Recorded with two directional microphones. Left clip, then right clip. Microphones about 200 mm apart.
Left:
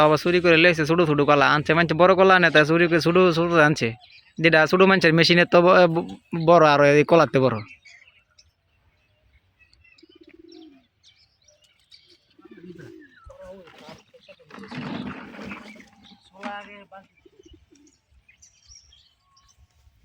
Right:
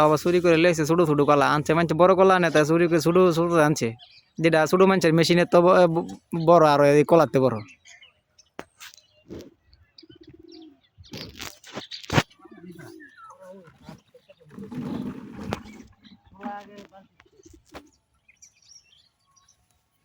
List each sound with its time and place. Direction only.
0.0 s speech: 5° right (ahead or behind)
9.9 s bird: 5° right (ahead or behind)
13.2 s wild animals: 55° right (ahead or behind)
16.4 s a sound: 40° right (ahead or behind)